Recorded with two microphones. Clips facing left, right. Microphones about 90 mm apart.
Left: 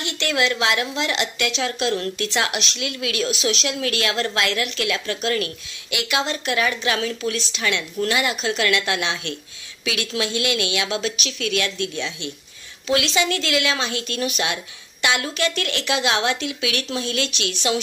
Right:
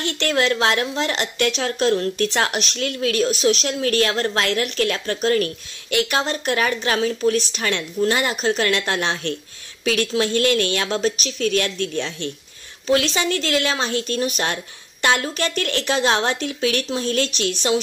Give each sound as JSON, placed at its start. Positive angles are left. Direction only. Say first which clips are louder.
{"t": 0.0, "sound": "a woman's voice", "louder": "right 2 dB", "side_deg": -40}